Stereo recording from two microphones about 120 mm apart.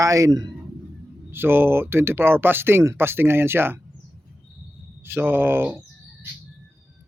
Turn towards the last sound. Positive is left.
turn(degrees=-20)  # may be behind; listen again after turning